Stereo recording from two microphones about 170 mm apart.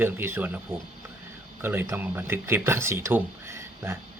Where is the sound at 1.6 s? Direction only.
10° right (ahead or behind).